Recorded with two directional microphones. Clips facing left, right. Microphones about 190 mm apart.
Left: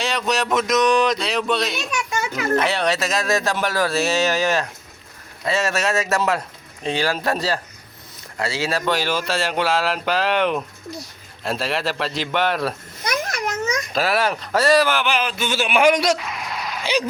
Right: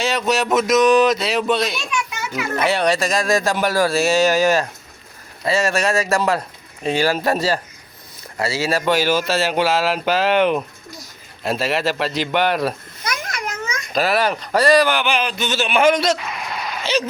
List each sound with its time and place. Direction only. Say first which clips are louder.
0.0 s speech: right 3 dB; 5° right (ahead or behind)
2.0 s children playing: left 2 dB; 45° left (ahead or behind)
2.6 s speech: right 5 dB; centre (ahead or behind)
13.1 s a sound: left 3 dB; 40° left (ahead or behind)
13.9 s speech: right 4 dB; centre (ahead or behind)
16.1 s a sound: right 1 dB; centre (ahead or behind)